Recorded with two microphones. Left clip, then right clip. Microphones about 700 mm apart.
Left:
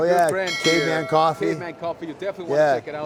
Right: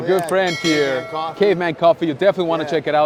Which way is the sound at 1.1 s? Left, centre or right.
Left.